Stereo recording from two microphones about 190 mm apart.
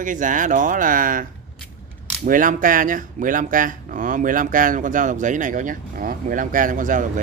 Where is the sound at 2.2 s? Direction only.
45° right (ahead or behind).